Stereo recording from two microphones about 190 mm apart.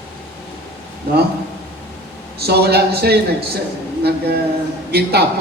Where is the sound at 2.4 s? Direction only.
55° right (ahead or behind).